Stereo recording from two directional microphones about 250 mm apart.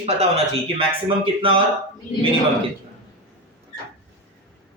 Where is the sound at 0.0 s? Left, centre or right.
Right.